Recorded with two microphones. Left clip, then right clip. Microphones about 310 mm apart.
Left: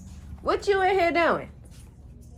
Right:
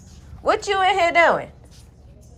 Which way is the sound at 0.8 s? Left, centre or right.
Centre.